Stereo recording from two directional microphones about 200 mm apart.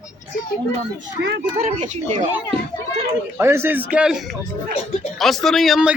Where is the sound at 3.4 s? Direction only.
15° right (ahead or behind).